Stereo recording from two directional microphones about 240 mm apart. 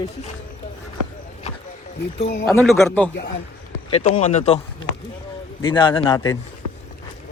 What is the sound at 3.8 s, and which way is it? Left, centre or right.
Speech, left.